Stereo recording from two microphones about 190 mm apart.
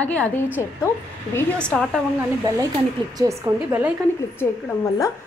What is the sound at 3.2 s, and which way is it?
Speech, 15° right (ahead or behind).